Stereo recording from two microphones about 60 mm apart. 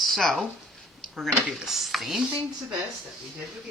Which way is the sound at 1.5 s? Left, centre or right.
Centre.